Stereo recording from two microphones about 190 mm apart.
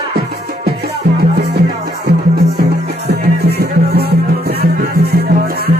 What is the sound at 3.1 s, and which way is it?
Music, 55° right (ahead or behind).